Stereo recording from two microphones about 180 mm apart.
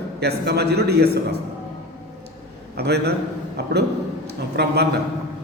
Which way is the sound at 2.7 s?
65° right (ahead or behind).